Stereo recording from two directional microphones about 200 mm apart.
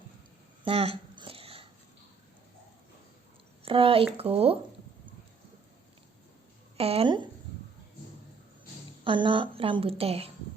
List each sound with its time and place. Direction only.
0.6 s a sound: 30° right (ahead or behind)
3.6 s a woman's voice: 25° right (ahead or behind)
6.7 s a woman's voice: 30° right (ahead or behind)
9.0 s a woman's voice: 25° right (ahead or behind)